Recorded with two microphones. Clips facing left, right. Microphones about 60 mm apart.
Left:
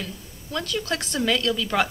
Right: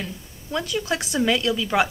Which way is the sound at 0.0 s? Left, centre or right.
Centre.